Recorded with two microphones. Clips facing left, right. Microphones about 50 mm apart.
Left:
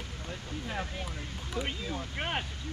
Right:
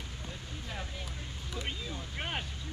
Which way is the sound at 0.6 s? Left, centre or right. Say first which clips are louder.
Left 5 dB; left.